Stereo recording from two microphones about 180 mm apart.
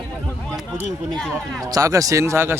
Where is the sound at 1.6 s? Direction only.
20° right (ahead or behind).